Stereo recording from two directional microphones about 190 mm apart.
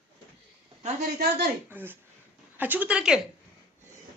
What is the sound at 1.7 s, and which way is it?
Speech, 10° right (ahead or behind).